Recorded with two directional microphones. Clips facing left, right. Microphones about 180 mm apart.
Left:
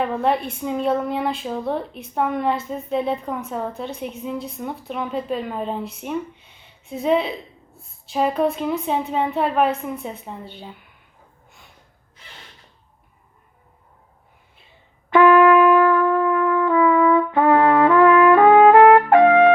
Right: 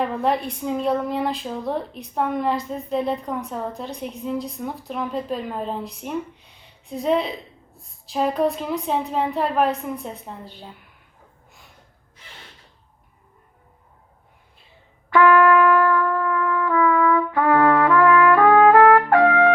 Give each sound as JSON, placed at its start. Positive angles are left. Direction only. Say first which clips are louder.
{"t": 0.0, "sound": "a woman's voice", "louder": "left 1 dB", "side_deg": 0}
{"t": 15.1, "sound": "music", "louder": "left 3 dB", "side_deg": 20}